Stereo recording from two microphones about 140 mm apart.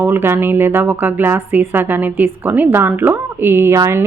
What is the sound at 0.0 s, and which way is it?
Speech, 15° right (ahead or behind).